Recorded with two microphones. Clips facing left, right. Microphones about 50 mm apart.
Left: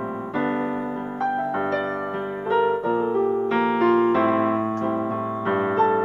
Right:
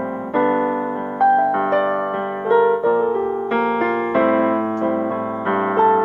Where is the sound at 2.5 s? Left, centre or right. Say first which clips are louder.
Right 6 dB; right.